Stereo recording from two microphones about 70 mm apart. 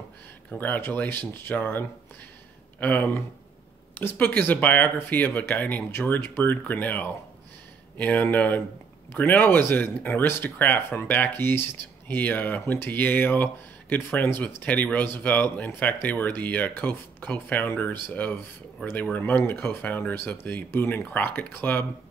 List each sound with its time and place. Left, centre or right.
0.6 s speech: left